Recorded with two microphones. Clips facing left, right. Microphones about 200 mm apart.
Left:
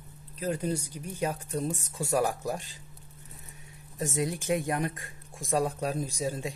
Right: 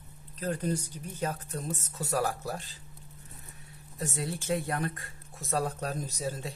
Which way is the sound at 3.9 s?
15° left (ahead or behind).